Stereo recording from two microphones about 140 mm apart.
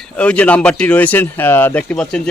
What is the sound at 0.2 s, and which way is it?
A man's voice, 10° left (ahead or behind).